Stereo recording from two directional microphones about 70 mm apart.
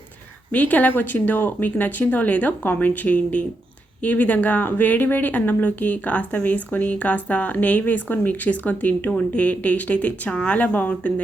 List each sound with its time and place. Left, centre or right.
0.5 s speech: left